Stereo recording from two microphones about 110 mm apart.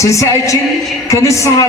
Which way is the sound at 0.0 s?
30° left (ahead or behind).